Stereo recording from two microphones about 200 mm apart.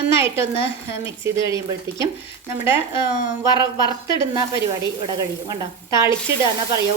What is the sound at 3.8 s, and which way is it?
Speech, 20° left (ahead or behind).